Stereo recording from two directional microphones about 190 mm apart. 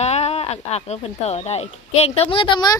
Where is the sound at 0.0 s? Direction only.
35° left (ahead or behind).